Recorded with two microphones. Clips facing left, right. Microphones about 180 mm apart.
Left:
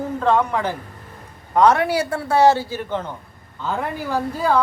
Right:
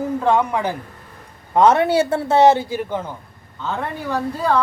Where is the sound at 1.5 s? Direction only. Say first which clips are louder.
Right 2 dB; 20° right (ahead or behind).